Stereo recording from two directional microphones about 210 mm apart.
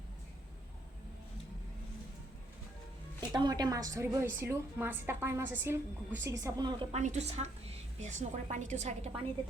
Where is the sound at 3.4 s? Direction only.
20° right (ahead or behind).